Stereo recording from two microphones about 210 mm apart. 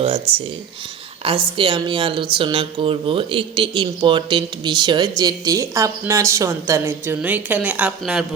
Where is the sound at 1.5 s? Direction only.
20° right (ahead or behind).